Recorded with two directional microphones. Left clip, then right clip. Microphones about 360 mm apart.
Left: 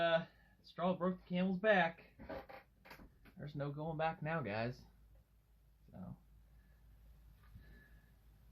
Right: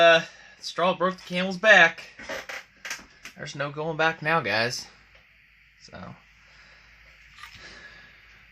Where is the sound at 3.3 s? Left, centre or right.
Right.